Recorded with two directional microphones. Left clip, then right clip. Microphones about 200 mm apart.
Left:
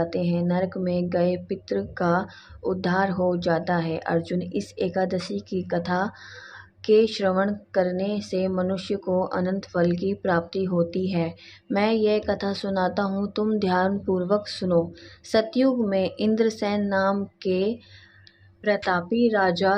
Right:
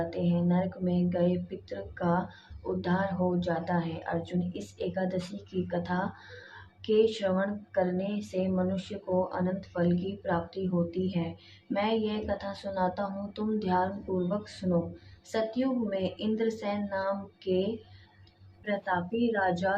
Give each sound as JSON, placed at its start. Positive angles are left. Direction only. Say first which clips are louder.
{"t": 0.0, "sound": "speech", "louder": "left 6 dB", "side_deg": 40}
{"t": 18.6, "sound": "speech", "louder": "left 8 dB", "side_deg": 35}